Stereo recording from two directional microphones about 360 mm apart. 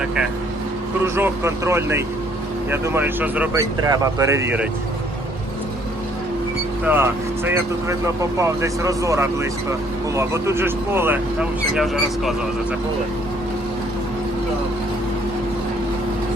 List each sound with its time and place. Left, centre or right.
1.0 s speech: centre
6.8 s speech: centre